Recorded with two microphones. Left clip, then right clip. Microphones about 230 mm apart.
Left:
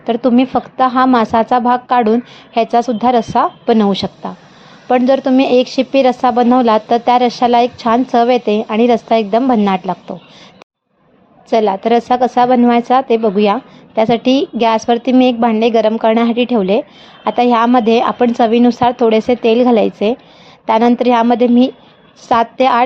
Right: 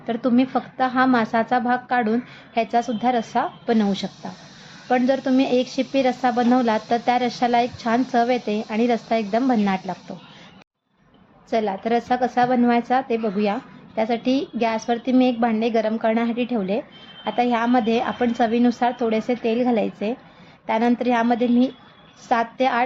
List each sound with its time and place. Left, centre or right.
0.0 s a woman's voice: left
11.4 s a woman's voice: left